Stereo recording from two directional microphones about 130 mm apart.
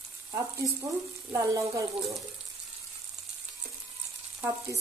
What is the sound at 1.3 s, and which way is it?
Speech, 25° right (ahead or behind).